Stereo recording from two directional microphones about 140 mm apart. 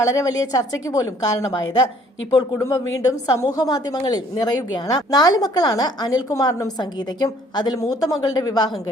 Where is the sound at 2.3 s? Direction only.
25° left (ahead or behind).